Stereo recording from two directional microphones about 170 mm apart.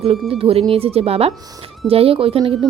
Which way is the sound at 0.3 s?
35° right (ahead or behind).